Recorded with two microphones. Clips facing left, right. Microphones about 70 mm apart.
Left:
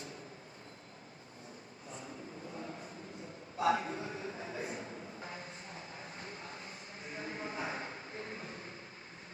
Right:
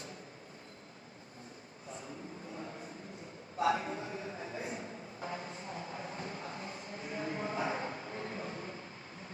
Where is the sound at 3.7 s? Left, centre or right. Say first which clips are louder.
Even; left.